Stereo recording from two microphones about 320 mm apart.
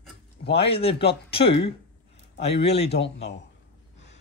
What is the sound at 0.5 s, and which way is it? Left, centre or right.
Speech, centre.